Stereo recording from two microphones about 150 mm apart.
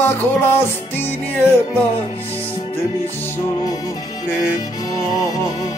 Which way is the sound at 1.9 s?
40° left (ahead or behind).